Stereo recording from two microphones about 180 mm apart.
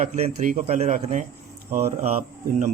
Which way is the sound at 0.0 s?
45° right (ahead or behind).